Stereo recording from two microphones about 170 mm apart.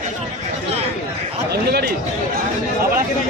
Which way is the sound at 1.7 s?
70° right (ahead or behind).